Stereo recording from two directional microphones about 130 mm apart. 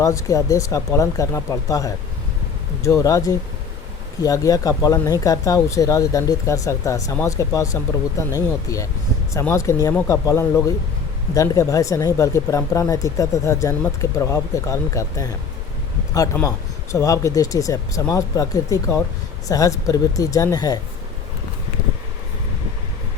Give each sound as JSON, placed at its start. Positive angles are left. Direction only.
{"t": 0.0, "sound": "speech", "side_deg": 25}